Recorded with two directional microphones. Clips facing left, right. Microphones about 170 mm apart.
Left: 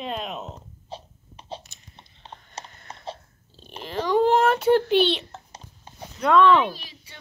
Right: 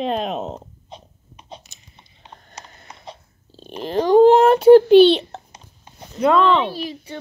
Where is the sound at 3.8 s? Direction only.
30° right (ahead or behind).